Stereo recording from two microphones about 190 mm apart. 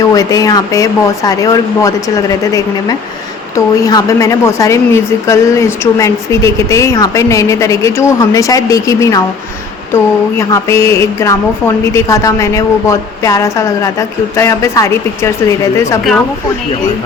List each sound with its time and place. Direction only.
0.0 s a woman's voice: 20° left (ahead or behind)